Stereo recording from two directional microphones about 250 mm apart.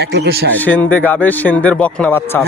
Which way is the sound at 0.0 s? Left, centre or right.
Right.